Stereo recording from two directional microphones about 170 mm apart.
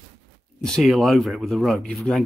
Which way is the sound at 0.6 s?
Centre (ahead or behind).